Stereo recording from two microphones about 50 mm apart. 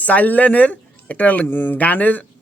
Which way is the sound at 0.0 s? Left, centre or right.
Left.